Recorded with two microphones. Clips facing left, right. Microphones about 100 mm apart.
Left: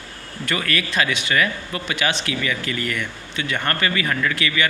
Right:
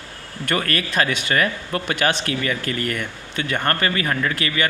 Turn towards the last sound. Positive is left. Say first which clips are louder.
# even
turn(degrees=-40)  # may be behind; listen again after turning